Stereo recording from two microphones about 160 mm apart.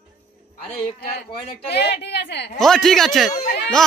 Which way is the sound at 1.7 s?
90° left.